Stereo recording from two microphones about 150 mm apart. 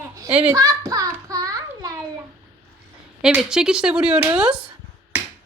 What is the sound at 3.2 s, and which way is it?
Speech, 5° right (ahead or behind).